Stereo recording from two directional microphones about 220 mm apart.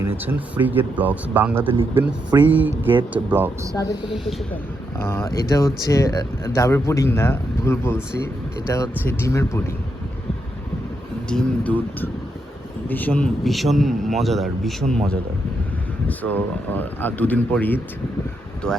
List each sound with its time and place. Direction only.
0.2 s speech: 10° right (ahead or behind)
1.8 s speech: 20° right (ahead or behind)
2.4 s speech: 10° right (ahead or behind)
3.8 s speech: 15° left (ahead or behind)
4.1 s a man's voice: centre (ahead or behind)
4.9 s speech: 10° left (ahead or behind)
11.3 s a man's voice: 5° left (ahead or behind)